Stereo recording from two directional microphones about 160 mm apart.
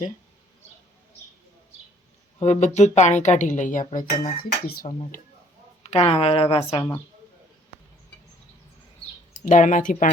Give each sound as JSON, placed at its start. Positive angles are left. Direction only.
{"t": 2.4, "sound": "speech", "side_deg": 45}
{"t": 5.8, "sound": "a woman's voice", "side_deg": 40}
{"t": 9.4, "sound": "speech", "side_deg": 50}